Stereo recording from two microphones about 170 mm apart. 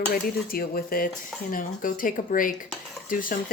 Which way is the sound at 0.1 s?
60° left (ahead or behind).